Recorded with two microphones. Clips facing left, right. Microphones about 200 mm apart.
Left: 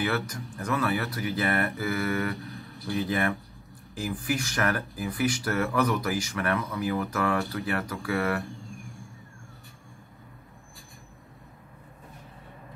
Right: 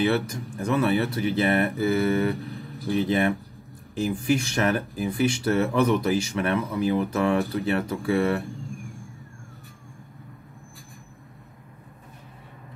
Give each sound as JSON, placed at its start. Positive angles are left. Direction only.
{"t": 0.0, "sound": "speech", "side_deg": -25}